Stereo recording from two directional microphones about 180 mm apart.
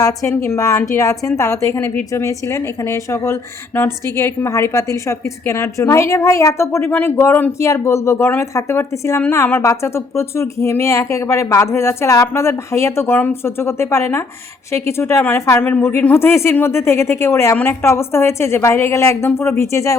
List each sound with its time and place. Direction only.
0.0 s a woman's voice: 15° left (ahead or behind)